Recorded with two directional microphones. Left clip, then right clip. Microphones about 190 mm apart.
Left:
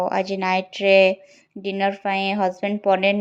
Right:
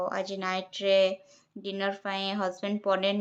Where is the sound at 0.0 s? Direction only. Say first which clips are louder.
Left 9 dB; 30° left (ahead or behind).